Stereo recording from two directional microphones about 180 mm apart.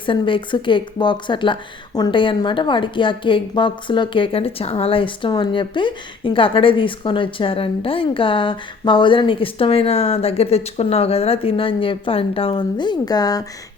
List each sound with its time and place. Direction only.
0.0 s a woman's voice: 30° left (ahead or behind)